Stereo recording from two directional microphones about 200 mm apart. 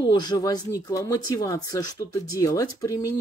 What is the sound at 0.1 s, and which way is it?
Speech, 20° left (ahead or behind).